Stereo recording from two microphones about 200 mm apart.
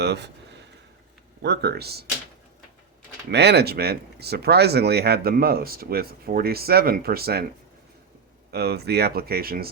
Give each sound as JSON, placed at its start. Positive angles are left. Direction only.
{"t": 0.0, "sound": "speech", "side_deg": -55}
{"t": 1.4, "sound": "speech", "side_deg": -55}
{"t": 3.2, "sound": "speech", "side_deg": -55}
{"t": 8.4, "sound": "speech", "side_deg": -55}